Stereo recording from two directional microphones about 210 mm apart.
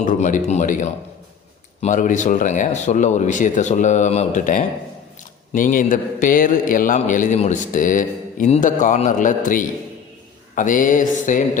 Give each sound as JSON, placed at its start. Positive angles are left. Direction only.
{"t": 0.0, "sound": "a man's voice", "side_deg": 35}